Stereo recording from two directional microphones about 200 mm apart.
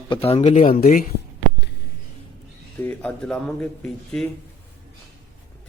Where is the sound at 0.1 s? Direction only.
30° left (ahead or behind).